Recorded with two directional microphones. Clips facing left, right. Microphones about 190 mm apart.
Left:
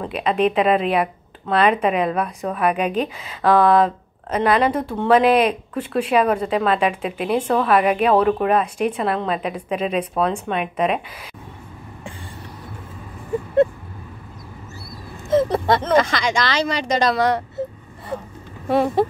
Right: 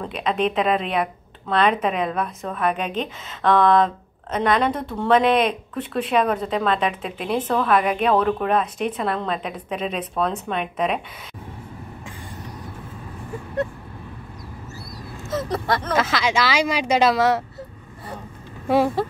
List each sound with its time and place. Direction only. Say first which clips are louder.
0.0 s a woman's voice: left 3 dB; 5° left (ahead or behind)
15.5 s speech: left 5 dB; 20° left (ahead or behind)
15.9 s a woman's voice: left 1 dB; 5° right (ahead or behind)